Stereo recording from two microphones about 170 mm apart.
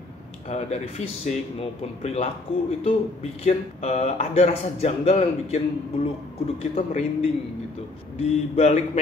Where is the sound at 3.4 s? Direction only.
40° left (ahead or behind).